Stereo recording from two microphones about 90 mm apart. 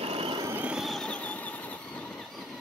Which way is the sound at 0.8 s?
Centre (ahead or behind).